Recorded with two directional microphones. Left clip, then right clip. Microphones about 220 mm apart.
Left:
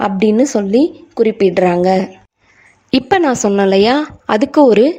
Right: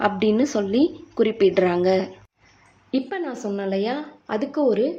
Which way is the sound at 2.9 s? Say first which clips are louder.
Left 14 dB; 50° left (ahead or behind).